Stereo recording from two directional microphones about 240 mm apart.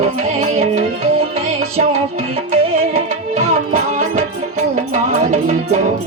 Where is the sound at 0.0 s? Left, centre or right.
Right.